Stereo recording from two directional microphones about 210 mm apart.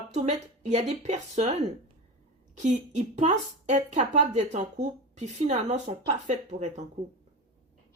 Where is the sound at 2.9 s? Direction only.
35° right (ahead or behind).